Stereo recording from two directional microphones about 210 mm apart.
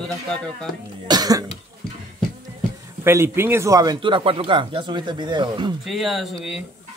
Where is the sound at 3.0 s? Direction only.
10° right (ahead or behind).